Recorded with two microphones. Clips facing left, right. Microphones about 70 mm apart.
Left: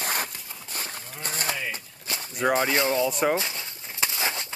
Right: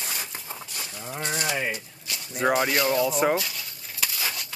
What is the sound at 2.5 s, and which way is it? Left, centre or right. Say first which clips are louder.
Speech: even; left.